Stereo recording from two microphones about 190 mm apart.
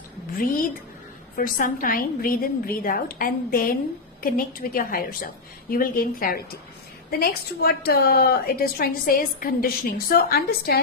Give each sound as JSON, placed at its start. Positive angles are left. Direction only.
{"t": 1.4, "sound": "a woman's voice", "side_deg": 50}